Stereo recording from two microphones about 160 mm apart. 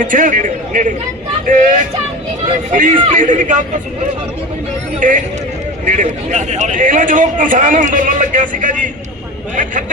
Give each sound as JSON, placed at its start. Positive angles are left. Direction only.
{"t": 0.0, "sound": "a man's voice", "side_deg": -55}
{"t": 2.7, "sound": "a man's voice", "side_deg": -55}
{"t": 4.9, "sound": "a man's voice", "side_deg": -55}